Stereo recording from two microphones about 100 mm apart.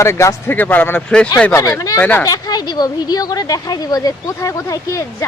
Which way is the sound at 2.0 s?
20° left (ahead or behind).